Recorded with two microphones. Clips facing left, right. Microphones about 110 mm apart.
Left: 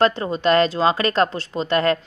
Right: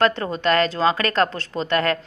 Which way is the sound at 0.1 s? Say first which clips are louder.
Left 2 dB; 20° left (ahead or behind).